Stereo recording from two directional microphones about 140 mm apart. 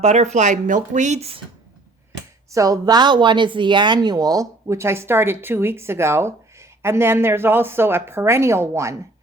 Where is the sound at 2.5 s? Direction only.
25° right (ahead or behind).